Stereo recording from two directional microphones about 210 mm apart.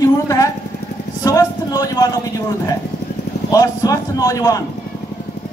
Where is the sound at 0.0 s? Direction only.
15° left (ahead or behind).